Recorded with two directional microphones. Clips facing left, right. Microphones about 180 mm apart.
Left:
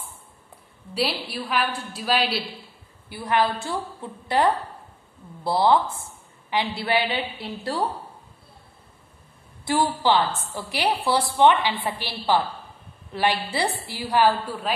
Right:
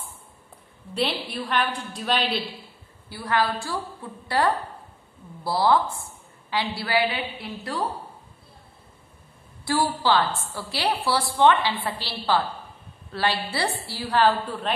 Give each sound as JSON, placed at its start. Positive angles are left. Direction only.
{"t": 0.9, "sound": "a woman's voice", "side_deg": 5}
{"t": 3.1, "sound": "a woman's voice", "side_deg": 20}
{"t": 9.7, "sound": "a woman's voice", "side_deg": 20}